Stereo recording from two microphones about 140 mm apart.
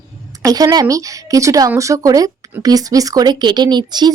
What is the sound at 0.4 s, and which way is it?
A woman's voice, 25° right (ahead or behind).